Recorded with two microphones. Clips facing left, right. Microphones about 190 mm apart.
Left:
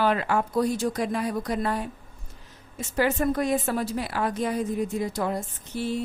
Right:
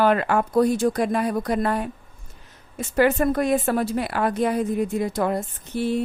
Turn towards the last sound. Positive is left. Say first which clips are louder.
# right 5 dB
turn(degrees=-60)  # may be behind; listen again after turning